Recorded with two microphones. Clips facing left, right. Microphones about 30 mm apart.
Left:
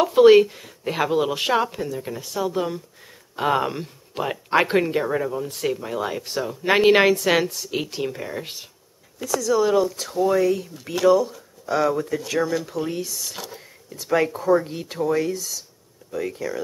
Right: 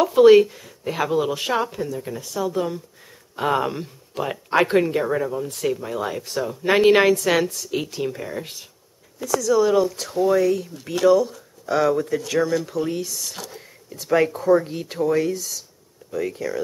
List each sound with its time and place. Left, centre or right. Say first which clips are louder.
0.0 s speech: right 1 dB; centre
4.2 s speech: even; left
4.6 s speech: right 1 dB; centre
8.0 s speech: right 1 dB; centre